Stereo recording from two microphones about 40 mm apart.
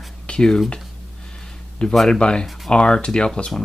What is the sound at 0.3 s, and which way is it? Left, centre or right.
Whispering, left.